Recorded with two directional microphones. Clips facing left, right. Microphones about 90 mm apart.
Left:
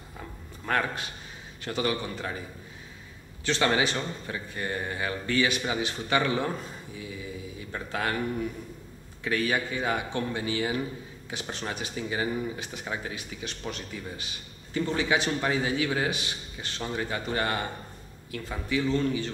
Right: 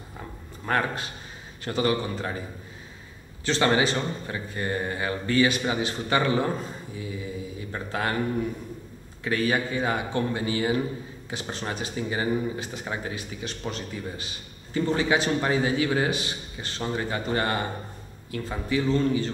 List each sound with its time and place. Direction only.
0.7 s a man's voice: 30° right (ahead or behind)
3.4 s a man's voice: 35° right (ahead or behind)
7.7 s speech: 35° right (ahead or behind)
9.2 s a man's voice: 35° right (ahead or behind)